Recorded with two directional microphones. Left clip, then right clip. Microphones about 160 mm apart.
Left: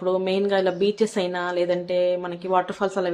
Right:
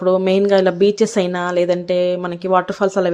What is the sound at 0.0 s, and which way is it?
A woman's voice, 45° right (ahead or behind).